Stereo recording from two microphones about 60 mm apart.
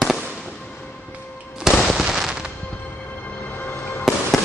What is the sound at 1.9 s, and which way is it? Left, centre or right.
Fireworks, centre.